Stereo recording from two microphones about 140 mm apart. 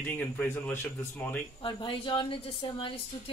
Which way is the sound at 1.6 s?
40° left (ahead or behind).